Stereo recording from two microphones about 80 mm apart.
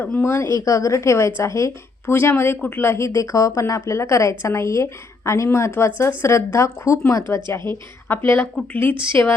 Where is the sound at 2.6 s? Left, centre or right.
Centre.